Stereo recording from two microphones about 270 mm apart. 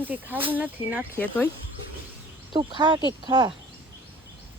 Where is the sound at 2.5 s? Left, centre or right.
Centre.